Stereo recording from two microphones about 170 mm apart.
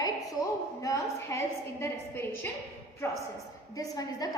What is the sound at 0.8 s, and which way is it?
A woman's voice, 20° left (ahead or behind).